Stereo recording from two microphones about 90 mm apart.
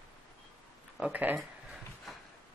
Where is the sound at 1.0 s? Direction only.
20° right (ahead or behind).